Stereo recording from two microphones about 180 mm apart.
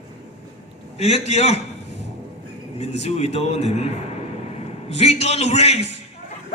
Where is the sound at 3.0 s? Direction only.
35° left (ahead or behind).